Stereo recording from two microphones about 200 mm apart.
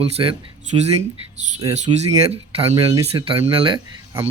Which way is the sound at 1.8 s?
35° right (ahead or behind).